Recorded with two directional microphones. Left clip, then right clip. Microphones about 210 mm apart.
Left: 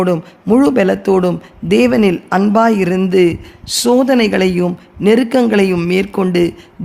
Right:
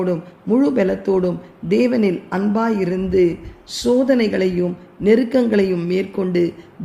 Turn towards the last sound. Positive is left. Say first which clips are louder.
# left 5 dB
turn(degrees=45)  # may be behind; listen again after turning